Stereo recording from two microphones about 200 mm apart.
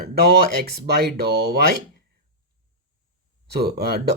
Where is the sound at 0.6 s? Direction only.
50° right (ahead or behind).